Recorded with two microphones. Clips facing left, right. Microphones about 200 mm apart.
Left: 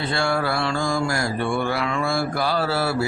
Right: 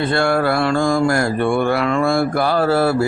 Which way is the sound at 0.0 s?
55° right (ahead or behind).